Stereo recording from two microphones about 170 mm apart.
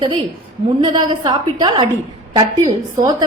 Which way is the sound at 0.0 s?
25° right (ahead or behind).